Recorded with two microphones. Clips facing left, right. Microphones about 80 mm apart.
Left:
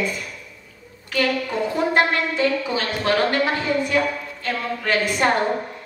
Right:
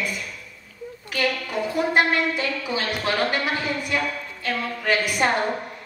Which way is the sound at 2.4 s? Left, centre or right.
Centre.